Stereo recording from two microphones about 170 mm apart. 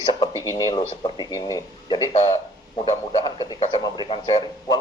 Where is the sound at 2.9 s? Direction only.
25° left (ahead or behind).